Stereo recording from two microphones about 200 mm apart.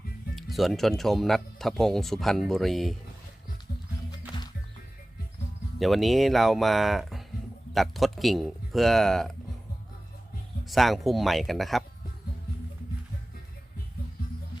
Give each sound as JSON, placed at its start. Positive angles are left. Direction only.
{"t": 0.5, "sound": "speech", "side_deg": 0}
{"t": 5.8, "sound": "speech", "side_deg": 0}
{"t": 10.7, "sound": "speech", "side_deg": 0}